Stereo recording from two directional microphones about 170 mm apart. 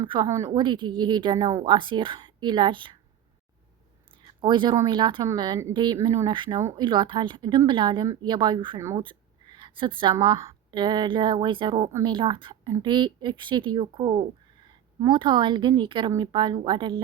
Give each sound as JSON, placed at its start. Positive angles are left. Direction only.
{"t": 0.1, "sound": "a woman's voice", "side_deg": -20}
{"t": 4.4, "sound": "a woman's voice", "side_deg": -30}
{"t": 6.6, "sound": "speech", "side_deg": -15}
{"t": 6.8, "sound": "a woman's voice", "side_deg": -25}